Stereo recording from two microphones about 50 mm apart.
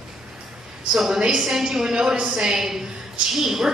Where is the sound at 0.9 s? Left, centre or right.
Centre.